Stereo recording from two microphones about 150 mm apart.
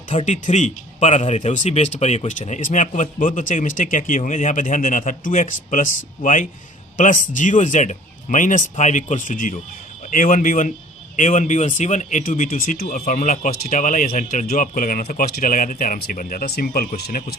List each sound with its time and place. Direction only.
0.1 s speech: 50° left (ahead or behind); by 17.3 s 85° left